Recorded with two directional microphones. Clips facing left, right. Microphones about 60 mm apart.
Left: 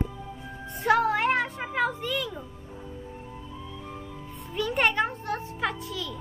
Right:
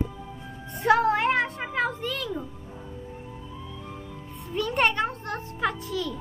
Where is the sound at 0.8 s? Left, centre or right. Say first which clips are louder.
Right 2 dB; centre.